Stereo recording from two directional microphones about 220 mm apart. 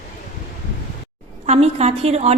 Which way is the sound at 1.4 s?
30° right (ahead or behind).